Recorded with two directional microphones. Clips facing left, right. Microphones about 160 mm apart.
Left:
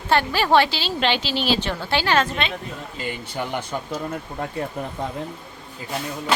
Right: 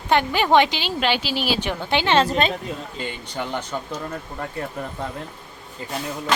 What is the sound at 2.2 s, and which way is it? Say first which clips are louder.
Speech: right 5 dB; 35° right (ahead or behind).